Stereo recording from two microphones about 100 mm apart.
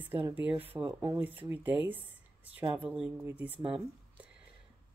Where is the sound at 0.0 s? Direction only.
20° right (ahead or behind).